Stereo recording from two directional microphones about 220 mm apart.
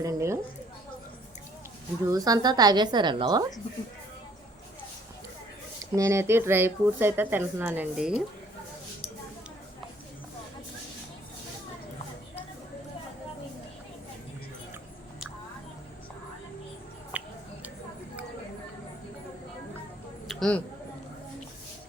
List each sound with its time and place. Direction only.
0.0 s speech: 15° right (ahead or behind)
2.0 s a woman's voice: 15° right (ahead or behind)
5.8 s speech: 15° right (ahead or behind)
17.1 s music: 5° right (ahead or behind)
20.2 s a sound: centre (ahead or behind)